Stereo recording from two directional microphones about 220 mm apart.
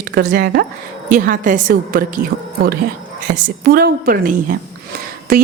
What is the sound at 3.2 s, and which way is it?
Speech, 40° right (ahead or behind).